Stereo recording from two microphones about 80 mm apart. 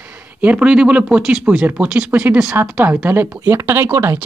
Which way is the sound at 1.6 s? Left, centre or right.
Right.